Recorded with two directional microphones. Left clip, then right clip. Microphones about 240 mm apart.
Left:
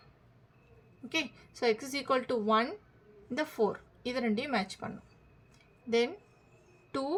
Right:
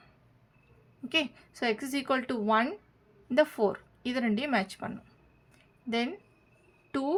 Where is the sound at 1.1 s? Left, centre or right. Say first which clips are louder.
Right 5 dB; right.